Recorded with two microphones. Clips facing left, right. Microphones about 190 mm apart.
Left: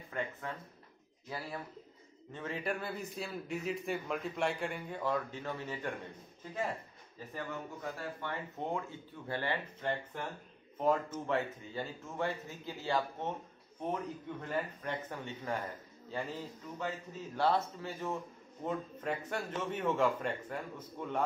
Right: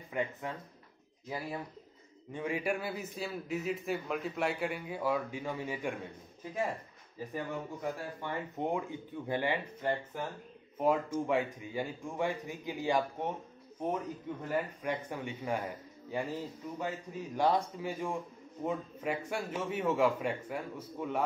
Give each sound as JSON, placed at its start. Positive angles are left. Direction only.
{"t": 0.1, "sound": "a man's voice", "side_deg": -15}
{"t": 2.3, "sound": "a man's voice", "side_deg": -10}
{"t": 7.3, "sound": "a man's voice", "side_deg": -15}
{"t": 14.4, "sound": "a man's voice", "side_deg": -10}